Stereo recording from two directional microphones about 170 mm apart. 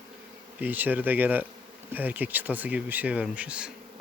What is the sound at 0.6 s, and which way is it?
Speech, 10° right (ahead or behind).